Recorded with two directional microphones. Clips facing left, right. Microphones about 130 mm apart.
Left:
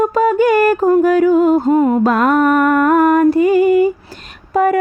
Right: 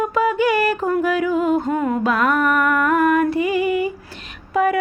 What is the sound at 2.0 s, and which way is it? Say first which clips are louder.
Music: left 6 dB; 40° left (ahead or behind).